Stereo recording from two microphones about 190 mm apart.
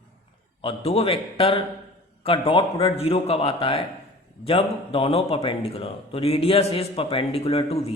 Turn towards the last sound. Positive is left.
turn(degrees=30)  # may be behind; listen again after turning